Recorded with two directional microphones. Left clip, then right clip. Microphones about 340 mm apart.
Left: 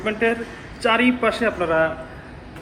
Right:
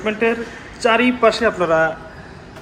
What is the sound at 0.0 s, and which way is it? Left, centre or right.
A man's voice, centre.